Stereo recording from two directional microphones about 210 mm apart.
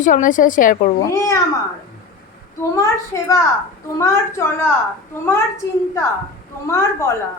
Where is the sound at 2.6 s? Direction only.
15° left (ahead or behind).